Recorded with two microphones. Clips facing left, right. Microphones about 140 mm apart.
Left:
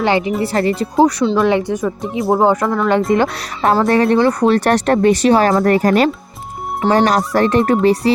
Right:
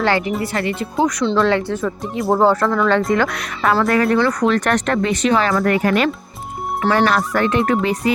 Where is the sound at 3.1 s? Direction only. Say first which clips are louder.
Left 3 dB; 25° left (ahead or behind).